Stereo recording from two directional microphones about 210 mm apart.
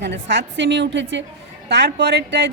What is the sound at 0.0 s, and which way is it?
A woman's voice, 55° right (ahead or behind).